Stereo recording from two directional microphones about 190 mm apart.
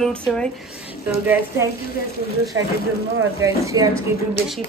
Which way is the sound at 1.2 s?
10° right (ahead or behind).